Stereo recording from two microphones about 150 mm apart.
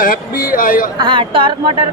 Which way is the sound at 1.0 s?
35° right (ahead or behind).